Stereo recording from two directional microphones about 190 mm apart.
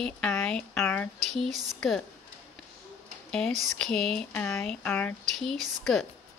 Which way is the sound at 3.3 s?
5° left (ahead or behind).